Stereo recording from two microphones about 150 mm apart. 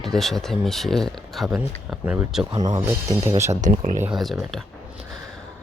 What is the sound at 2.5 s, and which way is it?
Speech, 25° right (ahead or behind).